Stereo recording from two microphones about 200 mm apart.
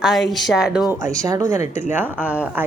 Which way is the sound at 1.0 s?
15° right (ahead or behind).